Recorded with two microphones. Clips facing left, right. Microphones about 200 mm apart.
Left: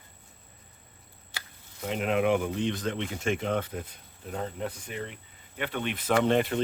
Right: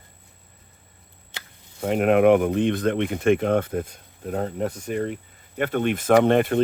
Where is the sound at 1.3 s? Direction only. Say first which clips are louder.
Right 2 dB; 20° right (ahead or behind).